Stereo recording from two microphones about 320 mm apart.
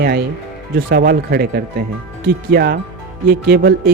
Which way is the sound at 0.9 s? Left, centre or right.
Right.